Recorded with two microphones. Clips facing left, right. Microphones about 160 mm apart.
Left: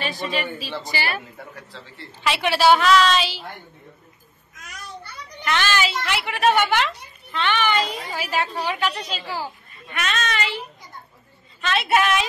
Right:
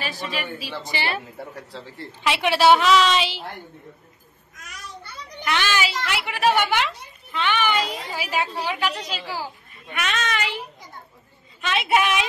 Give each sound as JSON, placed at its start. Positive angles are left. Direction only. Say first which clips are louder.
{"t": 0.2, "sound": "a woman's voice", "louder": "left 3 dB", "side_deg": -10}
{"t": 2.2, "sound": "a woman's voice", "louder": "even", "side_deg": -15}
{"t": 2.5, "sound": "a woman's voice", "louder": "even", "side_deg": 0}
{"t": 3.0, "sound": "a woman's voice", "louder": "left 1 dB", "side_deg": -20}
{"t": 5.4, "sound": "a woman's voice", "louder": "left 1 dB", "side_deg": -10}
{"t": 11.6, "sound": "a woman's voice", "louder": "left 1 dB", "side_deg": -15}